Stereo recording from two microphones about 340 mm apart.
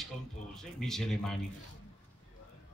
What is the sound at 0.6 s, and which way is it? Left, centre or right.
Speech, centre.